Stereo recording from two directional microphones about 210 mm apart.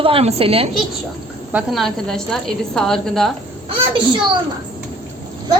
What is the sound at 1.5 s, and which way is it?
A woman's voice, 5° right (ahead or behind).